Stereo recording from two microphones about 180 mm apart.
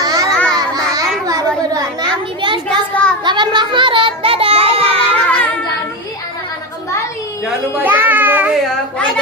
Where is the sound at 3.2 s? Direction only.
25° right (ahead or behind).